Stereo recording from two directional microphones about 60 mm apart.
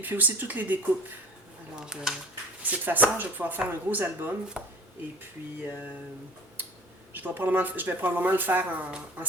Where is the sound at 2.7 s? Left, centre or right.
Right.